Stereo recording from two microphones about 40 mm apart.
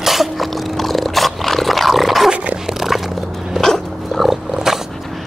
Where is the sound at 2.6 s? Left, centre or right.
Centre.